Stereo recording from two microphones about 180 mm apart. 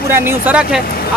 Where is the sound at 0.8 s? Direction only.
55° left (ahead or behind).